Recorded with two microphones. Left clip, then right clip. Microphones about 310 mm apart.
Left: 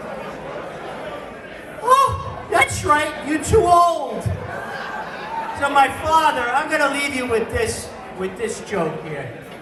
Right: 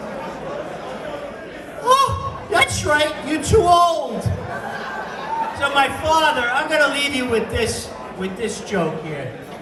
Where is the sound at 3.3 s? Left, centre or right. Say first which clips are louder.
Even; centre.